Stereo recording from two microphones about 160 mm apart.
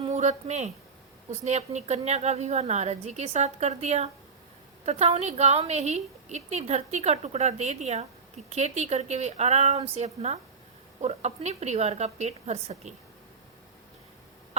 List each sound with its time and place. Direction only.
0.1 s a woman's voice: 45° right (ahead or behind)